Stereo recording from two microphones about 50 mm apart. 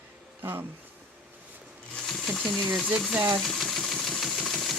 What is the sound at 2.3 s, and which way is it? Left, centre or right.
Speech, centre.